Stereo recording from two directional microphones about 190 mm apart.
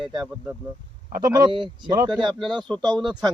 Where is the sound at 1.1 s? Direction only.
20° right (ahead or behind).